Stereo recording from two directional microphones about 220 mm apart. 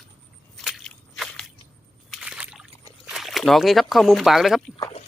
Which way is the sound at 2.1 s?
5° right (ahead or behind).